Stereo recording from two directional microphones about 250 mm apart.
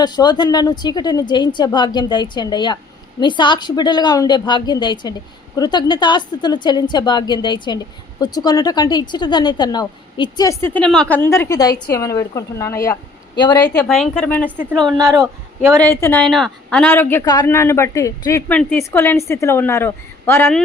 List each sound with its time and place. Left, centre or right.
0.0 s a woman's voice: centre
13.7 s a woman's voice: centre
14.9 s speech: centre
15.7 s a woman's voice: centre